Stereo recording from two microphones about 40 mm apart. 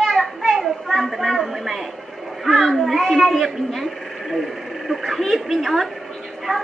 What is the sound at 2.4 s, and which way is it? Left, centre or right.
A man's voice, centre.